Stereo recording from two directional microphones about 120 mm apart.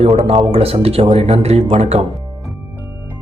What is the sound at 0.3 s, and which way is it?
Speech, 55° right (ahead or behind).